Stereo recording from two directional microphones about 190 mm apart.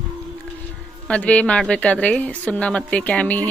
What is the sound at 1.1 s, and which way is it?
Speech, 5° left (ahead or behind).